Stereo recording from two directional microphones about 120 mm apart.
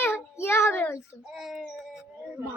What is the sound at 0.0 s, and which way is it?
Child singing, 20° left (ahead or behind).